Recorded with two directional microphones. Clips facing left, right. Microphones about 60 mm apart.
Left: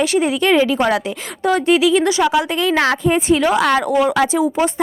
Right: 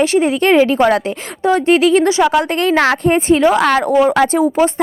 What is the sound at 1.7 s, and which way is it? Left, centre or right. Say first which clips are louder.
Speech: right 3 dB; right.